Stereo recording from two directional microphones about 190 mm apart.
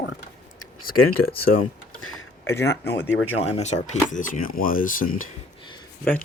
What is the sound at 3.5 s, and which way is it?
Speech, 35° left (ahead or behind).